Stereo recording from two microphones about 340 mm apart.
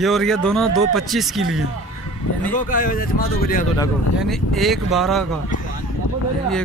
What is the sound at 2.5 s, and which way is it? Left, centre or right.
Speech, left.